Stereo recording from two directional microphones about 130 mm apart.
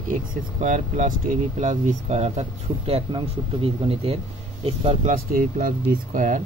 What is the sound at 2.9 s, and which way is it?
Speech, 40° right (ahead or behind).